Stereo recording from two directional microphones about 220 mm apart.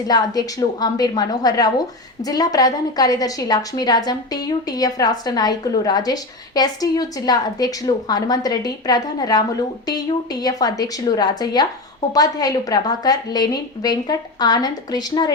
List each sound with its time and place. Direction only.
0.1 s a woman's voice: 15° left (ahead or behind)
10.4 s a woman's voice: 15° left (ahead or behind)